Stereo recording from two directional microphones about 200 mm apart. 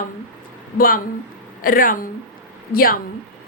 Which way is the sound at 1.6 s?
45° left (ahead or behind).